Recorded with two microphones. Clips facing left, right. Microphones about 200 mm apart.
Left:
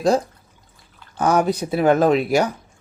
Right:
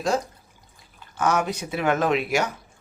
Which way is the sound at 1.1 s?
35° left (ahead or behind).